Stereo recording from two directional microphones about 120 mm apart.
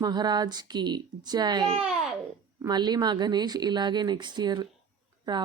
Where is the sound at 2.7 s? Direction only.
35° right (ahead or behind).